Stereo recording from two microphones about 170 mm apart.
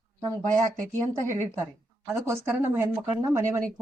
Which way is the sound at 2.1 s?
15° right (ahead or behind).